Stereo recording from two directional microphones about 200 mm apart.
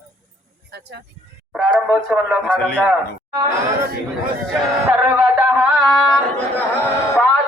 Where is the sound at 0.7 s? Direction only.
55° right (ahead or behind).